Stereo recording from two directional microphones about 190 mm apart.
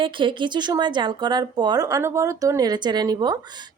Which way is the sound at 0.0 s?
25° right (ahead or behind).